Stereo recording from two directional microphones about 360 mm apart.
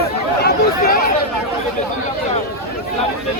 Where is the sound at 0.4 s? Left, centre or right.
Left.